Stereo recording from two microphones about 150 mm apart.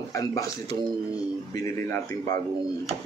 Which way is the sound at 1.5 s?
20° left (ahead or behind).